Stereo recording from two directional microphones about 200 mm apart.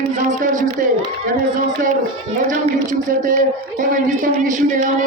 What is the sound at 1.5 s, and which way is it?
A man's voice, 40° right (ahead or behind).